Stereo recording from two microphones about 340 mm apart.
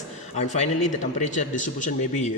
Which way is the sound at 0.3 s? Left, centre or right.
Centre.